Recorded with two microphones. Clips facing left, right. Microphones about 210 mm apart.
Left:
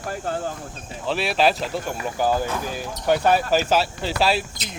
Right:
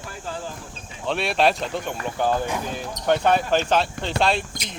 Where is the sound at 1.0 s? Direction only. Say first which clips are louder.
Even; centre (ahead or behind).